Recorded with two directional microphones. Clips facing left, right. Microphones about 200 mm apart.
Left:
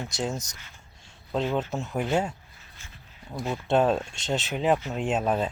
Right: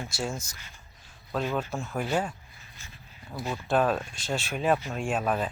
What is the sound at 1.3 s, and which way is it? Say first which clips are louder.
Speech: left 3 dB; 20° left (ahead or behind).